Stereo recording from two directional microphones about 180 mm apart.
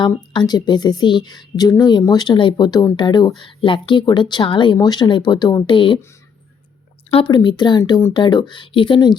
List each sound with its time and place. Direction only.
0.0 s a woman's voice: 25° left (ahead or behind)
7.1 s a woman's voice: 30° left (ahead or behind)